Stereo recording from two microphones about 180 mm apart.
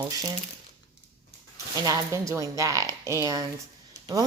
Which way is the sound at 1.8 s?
15° right (ahead or behind).